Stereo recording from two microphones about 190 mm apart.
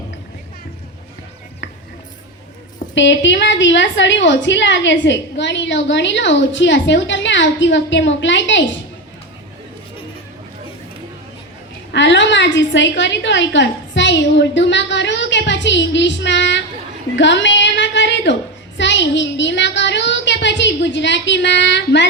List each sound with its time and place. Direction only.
2.9 s a woman's voice: 70° left (ahead or behind)
11.9 s a woman's voice: 70° left (ahead or behind)
17.2 s a sound: 70° left (ahead or behind)
18.8 s a woman's voice: 70° left (ahead or behind)